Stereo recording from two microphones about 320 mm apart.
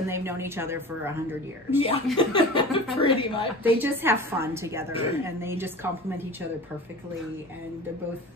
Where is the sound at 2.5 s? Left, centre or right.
Centre.